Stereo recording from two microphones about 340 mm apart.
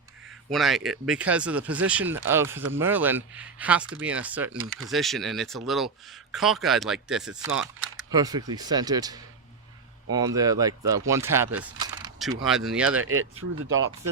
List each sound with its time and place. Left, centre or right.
0.5 s speech: centre
13.0 s speech: right